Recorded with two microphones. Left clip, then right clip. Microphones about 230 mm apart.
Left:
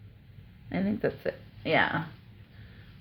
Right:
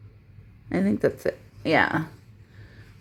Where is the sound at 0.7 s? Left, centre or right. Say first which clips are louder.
Right 6 dB; right.